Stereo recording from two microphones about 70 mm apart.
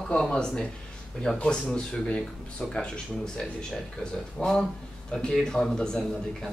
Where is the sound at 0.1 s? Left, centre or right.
Centre.